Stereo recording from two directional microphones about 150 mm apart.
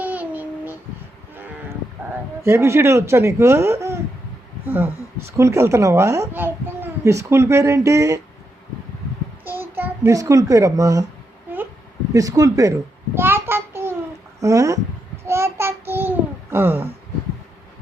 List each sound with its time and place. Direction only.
0.0 s a sound: 10° right (ahead or behind)
2.4 s a woman's voice: 20° right (ahead or behind)
9.4 s a child's voice: 15° right (ahead or behind)
12.1 s speech: 20° right (ahead or behind)
13.1 s child singing: 15° right (ahead or behind)
14.4 s speech: 20° right (ahead or behind)
15.3 s child singing: 15° right (ahead or behind)